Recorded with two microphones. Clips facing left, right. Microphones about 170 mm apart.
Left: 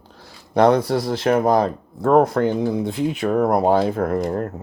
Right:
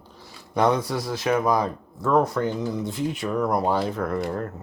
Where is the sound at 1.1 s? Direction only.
55° left (ahead or behind).